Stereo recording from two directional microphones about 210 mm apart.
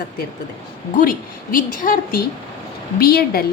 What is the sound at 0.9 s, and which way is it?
A woman's voice, 40° left (ahead or behind).